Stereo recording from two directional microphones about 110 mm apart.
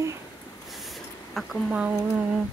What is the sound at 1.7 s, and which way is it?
Speech, 10° right (ahead or behind).